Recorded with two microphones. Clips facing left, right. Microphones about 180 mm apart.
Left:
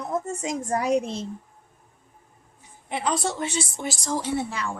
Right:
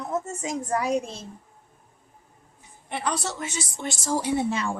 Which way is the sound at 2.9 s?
25° left (ahead or behind).